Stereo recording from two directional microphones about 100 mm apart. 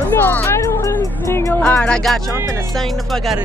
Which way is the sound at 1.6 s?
10° left (ahead or behind).